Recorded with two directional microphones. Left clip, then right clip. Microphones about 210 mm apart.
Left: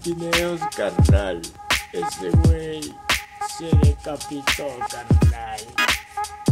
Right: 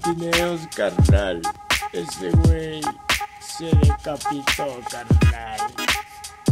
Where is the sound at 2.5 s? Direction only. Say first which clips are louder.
Right 1 dB; 20° right (ahead or behind).